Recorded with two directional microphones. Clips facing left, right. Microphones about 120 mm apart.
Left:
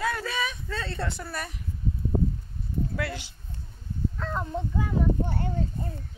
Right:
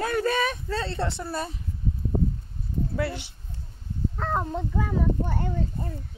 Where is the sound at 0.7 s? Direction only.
30° right (ahead or behind).